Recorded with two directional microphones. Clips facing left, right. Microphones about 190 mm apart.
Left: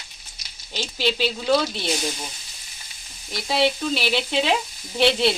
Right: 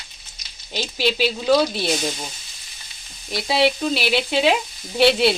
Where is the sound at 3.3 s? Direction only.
10° right (ahead or behind).